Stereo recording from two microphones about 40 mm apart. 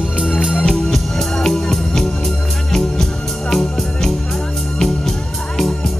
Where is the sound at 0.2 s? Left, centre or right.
Centre.